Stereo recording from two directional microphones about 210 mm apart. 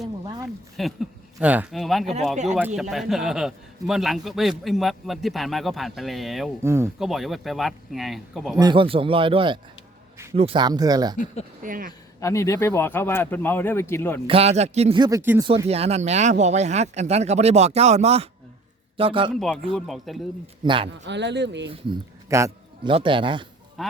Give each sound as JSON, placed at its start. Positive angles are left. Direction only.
{"t": 0.8, "sound": "a man's voice", "side_deg": 0}
{"t": 6.6, "sound": "speech", "side_deg": -10}
{"t": 7.0, "sound": "a man's voice", "side_deg": 0}
{"t": 8.5, "sound": "speech", "side_deg": -20}
{"t": 11.6, "sound": "speech", "side_deg": -40}
{"t": 12.2, "sound": "speech", "side_deg": 15}
{"t": 14.3, "sound": "speech", "side_deg": -30}
{"t": 15.4, "sound": "speech", "side_deg": -25}
{"t": 19.3, "sound": "a man's voice", "side_deg": 0}
{"t": 20.7, "sound": "speech", "side_deg": -25}
{"t": 21.0, "sound": "speech", "side_deg": -55}
{"t": 21.7, "sound": "a man's voice", "side_deg": -20}
{"t": 23.8, "sound": "speech", "side_deg": 0}